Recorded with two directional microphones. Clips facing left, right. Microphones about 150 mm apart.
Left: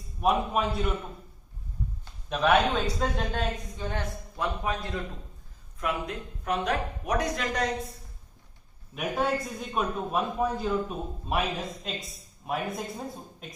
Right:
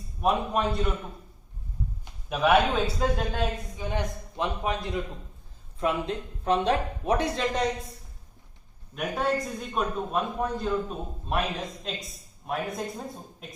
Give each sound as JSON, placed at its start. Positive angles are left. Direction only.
{"t": 0.2, "sound": "a man's voice", "side_deg": 0}
{"t": 2.3, "sound": "a man's voice", "side_deg": -5}
{"t": 3.8, "sound": "a man's voice", "side_deg": -15}
{"t": 9.0, "sound": "a man's voice", "side_deg": 0}